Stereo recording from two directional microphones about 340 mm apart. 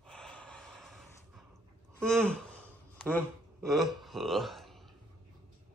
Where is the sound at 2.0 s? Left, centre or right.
Centre.